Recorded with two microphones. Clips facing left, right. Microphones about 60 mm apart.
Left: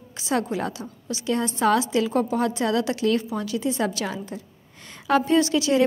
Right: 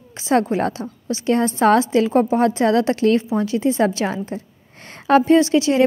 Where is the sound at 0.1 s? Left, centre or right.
Right.